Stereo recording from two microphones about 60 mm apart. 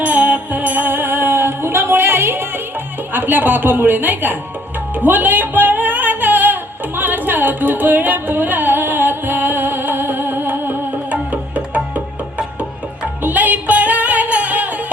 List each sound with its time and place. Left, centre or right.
0.0 s music: right
3.1 s a man's voice: right
4.9 s music: right
11.1 s music: right